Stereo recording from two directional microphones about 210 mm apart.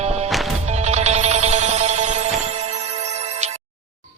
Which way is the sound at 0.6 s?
30° right (ahead or behind).